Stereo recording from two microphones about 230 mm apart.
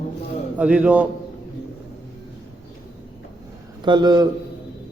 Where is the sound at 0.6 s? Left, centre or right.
Centre.